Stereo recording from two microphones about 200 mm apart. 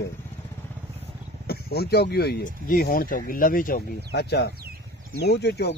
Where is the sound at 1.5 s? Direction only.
50° left (ahead or behind).